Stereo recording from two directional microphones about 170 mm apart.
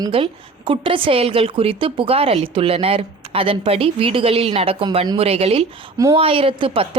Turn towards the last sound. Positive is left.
turn(degrees=-30)  # may be behind; listen again after turning